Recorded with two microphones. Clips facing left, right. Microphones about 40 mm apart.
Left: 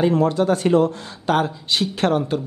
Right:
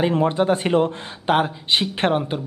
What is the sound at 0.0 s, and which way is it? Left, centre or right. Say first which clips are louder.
Speech: left 1 dB; right.